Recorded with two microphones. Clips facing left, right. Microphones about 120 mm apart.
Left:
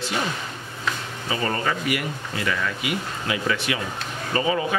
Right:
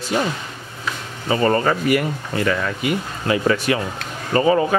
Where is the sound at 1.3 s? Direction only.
45° right (ahead or behind).